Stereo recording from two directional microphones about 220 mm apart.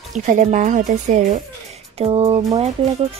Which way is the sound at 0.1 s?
35° right (ahead or behind).